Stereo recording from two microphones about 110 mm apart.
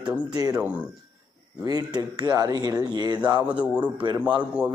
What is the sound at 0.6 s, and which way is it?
Speech, 10° right (ahead or behind).